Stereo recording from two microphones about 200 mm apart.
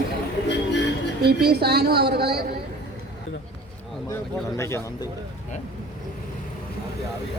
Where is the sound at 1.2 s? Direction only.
55° right (ahead or behind).